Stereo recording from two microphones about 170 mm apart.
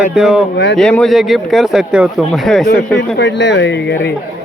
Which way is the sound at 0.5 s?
80° left.